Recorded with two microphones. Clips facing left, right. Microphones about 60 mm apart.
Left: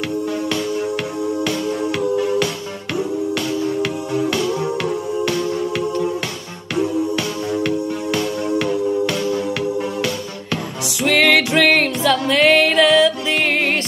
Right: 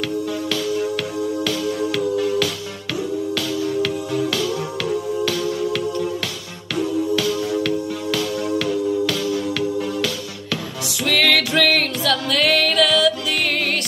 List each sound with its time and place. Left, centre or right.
1.6 s music: left
7.4 s music: centre